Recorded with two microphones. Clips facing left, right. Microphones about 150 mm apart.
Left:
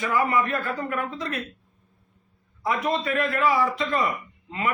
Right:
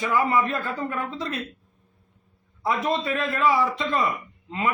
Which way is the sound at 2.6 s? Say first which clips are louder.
Right 1 dB; 25° right (ahead or behind).